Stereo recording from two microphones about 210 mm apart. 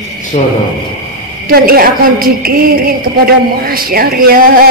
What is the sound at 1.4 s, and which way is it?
A woman's voice, 45° right (ahead or behind).